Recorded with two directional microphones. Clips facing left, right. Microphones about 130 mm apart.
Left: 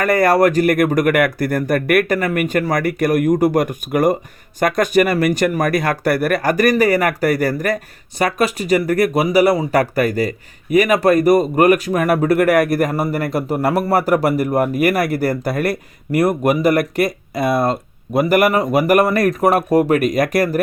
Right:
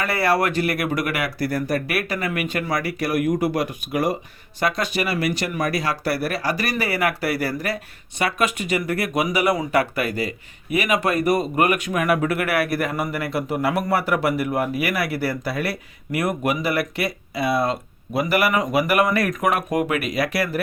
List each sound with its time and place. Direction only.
0.0 s speech: 45° left (ahead or behind)